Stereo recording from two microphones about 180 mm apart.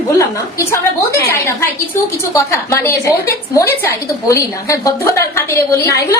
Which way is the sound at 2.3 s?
15° left (ahead or behind).